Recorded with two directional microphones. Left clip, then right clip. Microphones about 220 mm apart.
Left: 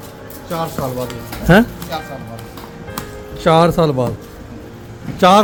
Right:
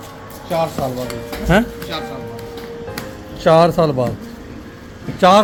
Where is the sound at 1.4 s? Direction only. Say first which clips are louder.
Left 4 dB; 30° left (ahead or behind).